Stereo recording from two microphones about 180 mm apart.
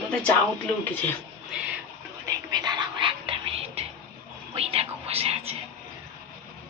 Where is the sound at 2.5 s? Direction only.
25° right (ahead or behind).